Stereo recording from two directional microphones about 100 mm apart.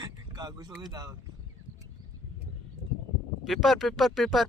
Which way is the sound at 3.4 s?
Centre (ahead or behind).